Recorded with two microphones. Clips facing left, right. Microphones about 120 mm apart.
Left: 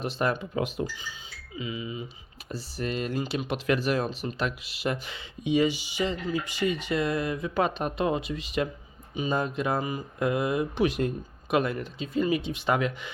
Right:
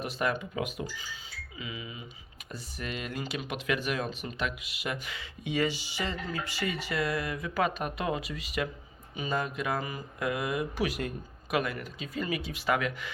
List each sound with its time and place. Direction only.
0.0 s speech: 30° left (ahead or behind)